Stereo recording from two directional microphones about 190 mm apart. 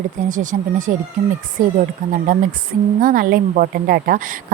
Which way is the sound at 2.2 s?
45° right (ahead or behind).